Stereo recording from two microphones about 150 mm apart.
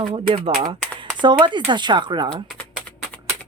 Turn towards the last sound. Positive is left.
turn(degrees=10)  # may be behind; listen again after turning